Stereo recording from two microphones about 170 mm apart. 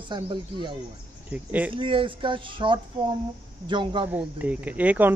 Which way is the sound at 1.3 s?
10° right (ahead or behind).